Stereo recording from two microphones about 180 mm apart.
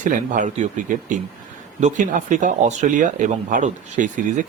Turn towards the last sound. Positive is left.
turn(degrees=-45)  # may be behind; listen again after turning